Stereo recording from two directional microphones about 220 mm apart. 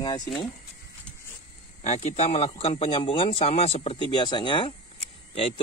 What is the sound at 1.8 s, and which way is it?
Speech, 30° left (ahead or behind).